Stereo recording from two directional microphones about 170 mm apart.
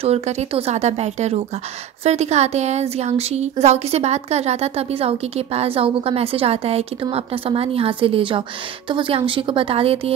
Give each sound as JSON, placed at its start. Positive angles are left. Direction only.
{"t": 0.0, "sound": "a woman's voice", "side_deg": -35}